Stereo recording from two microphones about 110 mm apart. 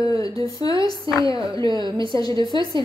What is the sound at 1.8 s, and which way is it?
Speech, 45° right (ahead or behind).